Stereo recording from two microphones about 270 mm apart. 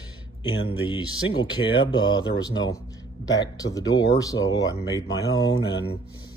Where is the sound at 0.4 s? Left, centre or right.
Centre.